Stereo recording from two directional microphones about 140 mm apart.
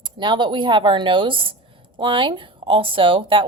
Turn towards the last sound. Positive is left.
turn(degrees=-40)  # may be behind; listen again after turning